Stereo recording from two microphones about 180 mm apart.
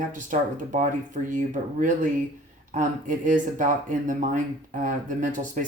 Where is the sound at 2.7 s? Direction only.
45° right (ahead or behind).